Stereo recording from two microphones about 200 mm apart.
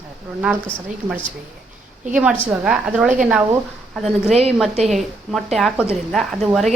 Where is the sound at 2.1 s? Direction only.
5° right (ahead or behind).